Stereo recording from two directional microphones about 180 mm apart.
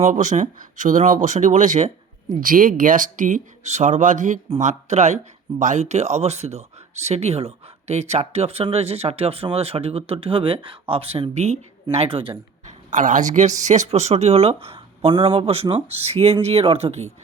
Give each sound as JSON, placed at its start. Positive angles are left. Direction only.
{"t": 0.0, "sound": "speech", "side_deg": -45}
{"t": 12.6, "sound": "a woman's voice", "side_deg": -45}